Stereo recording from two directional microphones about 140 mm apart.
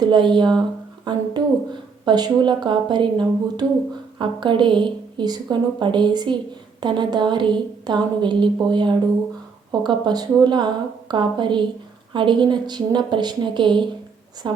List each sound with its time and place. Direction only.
0.0 s a woman's voice: 35° right (ahead or behind)